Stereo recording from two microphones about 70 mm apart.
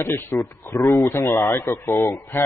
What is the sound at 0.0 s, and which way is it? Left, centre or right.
A man's voice, left.